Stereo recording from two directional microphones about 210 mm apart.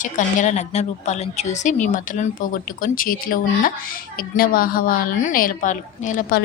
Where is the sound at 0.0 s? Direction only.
35° left (ahead or behind).